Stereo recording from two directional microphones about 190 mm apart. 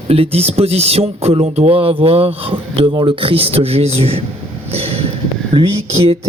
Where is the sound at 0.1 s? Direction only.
30° right (ahead or behind).